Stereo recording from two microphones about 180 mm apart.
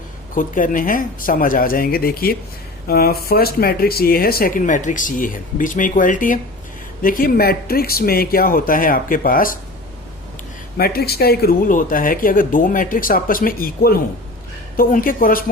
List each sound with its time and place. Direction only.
0.3 s speech: 50° left (ahead or behind)
10.8 s speech: 60° left (ahead or behind)